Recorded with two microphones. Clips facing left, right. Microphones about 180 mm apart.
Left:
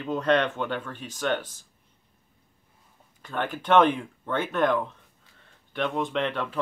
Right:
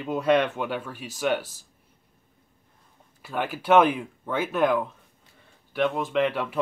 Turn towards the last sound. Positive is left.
turn(degrees=-10)  # may be behind; listen again after turning